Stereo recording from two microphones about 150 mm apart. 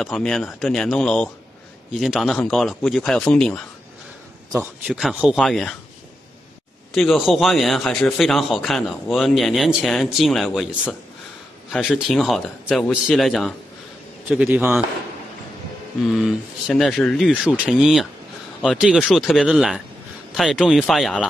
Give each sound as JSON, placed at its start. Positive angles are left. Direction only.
{"t": 0.0, "sound": "speech", "side_deg": 5}
{"t": 4.5, "sound": "speech", "side_deg": -15}
{"t": 4.9, "sound": "speech", "side_deg": -5}
{"t": 6.9, "sound": "speech", "side_deg": 0}
{"t": 16.2, "sound": "speech", "side_deg": 0}